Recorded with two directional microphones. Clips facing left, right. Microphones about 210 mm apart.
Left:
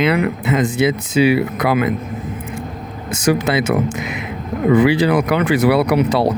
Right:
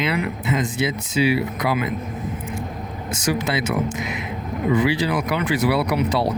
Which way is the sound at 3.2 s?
60° left (ahead or behind).